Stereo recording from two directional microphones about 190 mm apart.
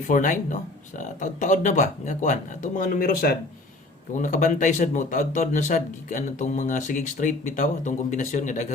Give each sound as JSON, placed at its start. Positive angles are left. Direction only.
{"t": 0.1, "sound": "speech", "side_deg": 40}